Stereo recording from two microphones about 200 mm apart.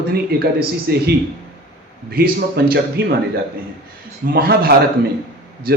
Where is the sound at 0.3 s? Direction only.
50° right (ahead or behind).